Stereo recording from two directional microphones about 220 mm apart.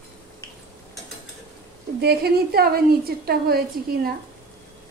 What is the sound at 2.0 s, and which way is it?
A woman's voice, 45° right (ahead or behind).